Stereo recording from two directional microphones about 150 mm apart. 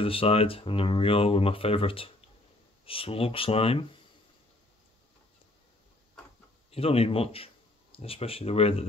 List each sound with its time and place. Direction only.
0.0 s speech: 40° left (ahead or behind)
6.7 s speech: 40° left (ahead or behind)